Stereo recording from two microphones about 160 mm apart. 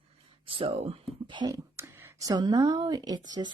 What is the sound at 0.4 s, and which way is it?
Speech, 35° right (ahead or behind).